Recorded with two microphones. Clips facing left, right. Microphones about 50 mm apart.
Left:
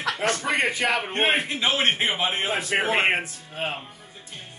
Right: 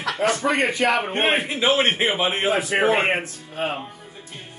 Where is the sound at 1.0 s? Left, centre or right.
Centre.